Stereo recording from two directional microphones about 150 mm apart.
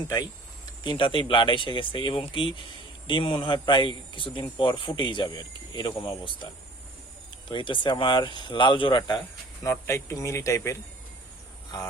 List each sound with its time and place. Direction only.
0.9 s a man's voice: 35° left (ahead or behind)
9.6 s speech: 20° left (ahead or behind)